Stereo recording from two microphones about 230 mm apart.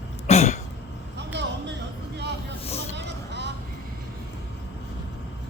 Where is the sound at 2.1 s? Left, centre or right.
Right.